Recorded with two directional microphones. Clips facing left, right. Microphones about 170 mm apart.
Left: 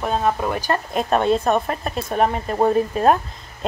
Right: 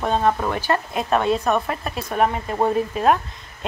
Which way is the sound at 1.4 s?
25° left (ahead or behind).